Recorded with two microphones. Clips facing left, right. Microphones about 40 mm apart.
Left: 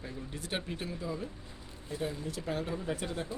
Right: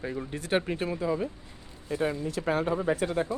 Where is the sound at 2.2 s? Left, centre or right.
Right.